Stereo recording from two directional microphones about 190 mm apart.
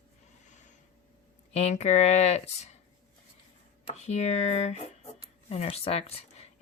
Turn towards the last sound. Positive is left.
turn(degrees=35)  # may be behind; listen again after turning